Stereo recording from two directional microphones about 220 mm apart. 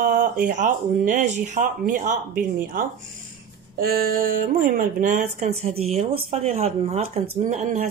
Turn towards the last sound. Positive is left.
turn(degrees=-30)  # may be behind; listen again after turning